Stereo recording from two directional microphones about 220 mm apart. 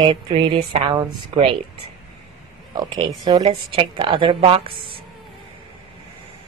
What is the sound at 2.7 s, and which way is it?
Speech, 20° right (ahead or behind).